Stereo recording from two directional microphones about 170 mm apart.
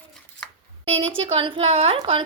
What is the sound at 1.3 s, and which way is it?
Speech, 30° right (ahead or behind).